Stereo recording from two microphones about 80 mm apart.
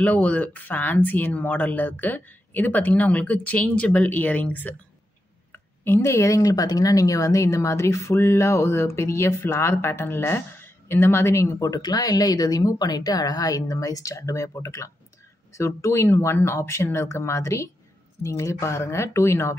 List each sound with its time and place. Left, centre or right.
0.0 s speech: centre; by 19.5 s left